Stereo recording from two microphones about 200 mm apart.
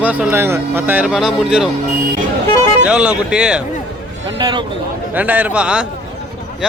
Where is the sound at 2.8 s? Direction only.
5° right (ahead or behind).